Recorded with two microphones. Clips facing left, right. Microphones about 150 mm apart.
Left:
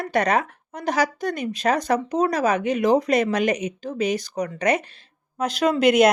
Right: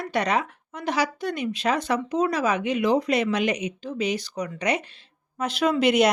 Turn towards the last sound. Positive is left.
turn(degrees=45)  # may be behind; listen again after turning